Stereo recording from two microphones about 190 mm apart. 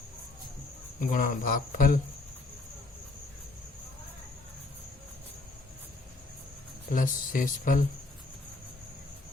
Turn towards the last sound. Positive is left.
turn(degrees=45)  # may be behind; listen again after turning